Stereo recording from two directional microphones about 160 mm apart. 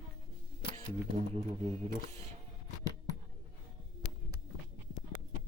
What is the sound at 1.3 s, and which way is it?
Music, 40° right (ahead or behind).